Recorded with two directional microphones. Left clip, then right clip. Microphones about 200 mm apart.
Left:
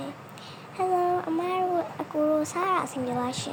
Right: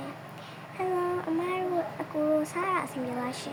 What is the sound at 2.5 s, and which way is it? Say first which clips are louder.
Speech: left 3 dB; 20° left (ahead or behind).